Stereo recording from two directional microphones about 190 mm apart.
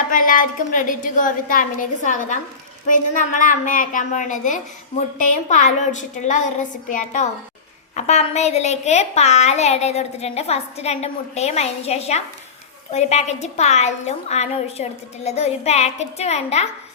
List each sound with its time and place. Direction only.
0.1 s a woman's voice: 45° left (ahead or behind)